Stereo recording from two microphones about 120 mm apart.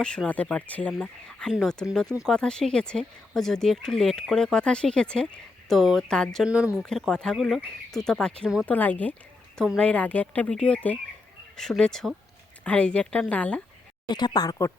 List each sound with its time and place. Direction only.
0.0 s speech: 5° left (ahead or behind)
6.4 s speech: 10° right (ahead or behind)
6.8 s speech: 5° left (ahead or behind)
14.1 s speech: 35° left (ahead or behind)